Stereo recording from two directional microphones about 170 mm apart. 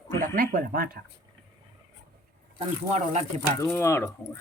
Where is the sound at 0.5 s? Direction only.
60° right (ahead or behind).